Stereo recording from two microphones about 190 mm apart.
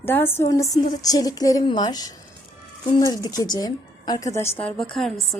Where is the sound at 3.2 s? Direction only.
20° left (ahead or behind).